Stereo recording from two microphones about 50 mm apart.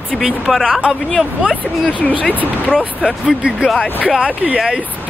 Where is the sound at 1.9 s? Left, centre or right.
Left.